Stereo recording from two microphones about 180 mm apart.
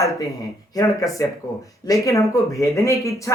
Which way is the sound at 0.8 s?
20° left (ahead or behind).